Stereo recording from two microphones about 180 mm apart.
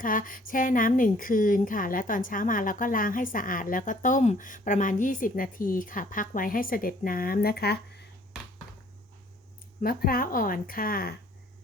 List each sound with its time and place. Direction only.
0.0 s a woman's voice: 50° left (ahead or behind)
9.8 s a woman's voice: 55° left (ahead or behind)